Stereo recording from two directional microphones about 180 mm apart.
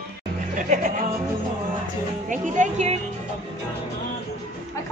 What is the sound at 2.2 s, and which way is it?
Speech, 45° right (ahead or behind).